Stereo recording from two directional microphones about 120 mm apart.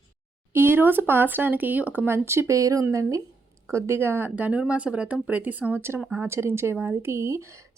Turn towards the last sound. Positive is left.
turn(degrees=-20)  # may be behind; listen again after turning